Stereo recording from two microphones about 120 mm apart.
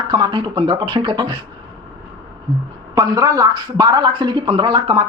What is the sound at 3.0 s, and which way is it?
Speech, 30° right (ahead or behind).